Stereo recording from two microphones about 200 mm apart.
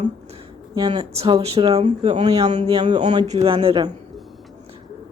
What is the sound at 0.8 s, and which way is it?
Speech, 25° right (ahead or behind).